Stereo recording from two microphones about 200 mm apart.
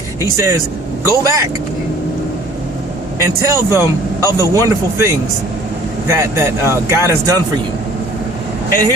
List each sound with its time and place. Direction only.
0.2 s speech: 15° right (ahead or behind)
3.2 s speech: 15° right (ahead or behind)